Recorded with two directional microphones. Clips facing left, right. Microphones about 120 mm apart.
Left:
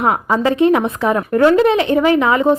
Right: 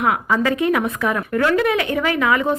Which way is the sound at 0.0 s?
30° left (ahead or behind).